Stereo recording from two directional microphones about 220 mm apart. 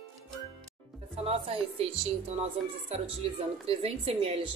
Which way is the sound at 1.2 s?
25° right (ahead or behind).